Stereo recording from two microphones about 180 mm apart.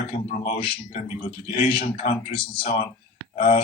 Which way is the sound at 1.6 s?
30° left (ahead or behind).